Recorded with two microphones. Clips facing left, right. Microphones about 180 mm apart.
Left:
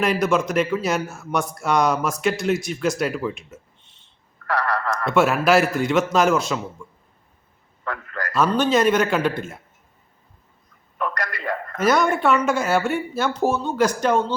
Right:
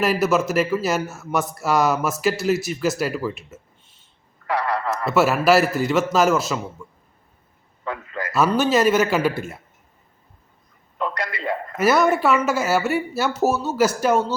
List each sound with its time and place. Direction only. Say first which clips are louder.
0.0 s a man's voice: right 1 dB; 5° right (ahead or behind)
4.4 s a sound: right 1 dB; 15° right (ahead or behind)
4.9 s a man's voice: even; 5° right (ahead or behind)
7.9 s a man's voice: right 1 dB; 15° right (ahead or behind)
11.2 s a sound: right 1 dB; 15° right (ahead or behind)
11.8 s speech: right 1 dB; 5° right (ahead or behind)